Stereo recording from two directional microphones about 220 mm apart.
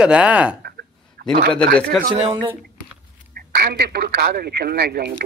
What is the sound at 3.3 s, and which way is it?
Speech, 45° right (ahead or behind).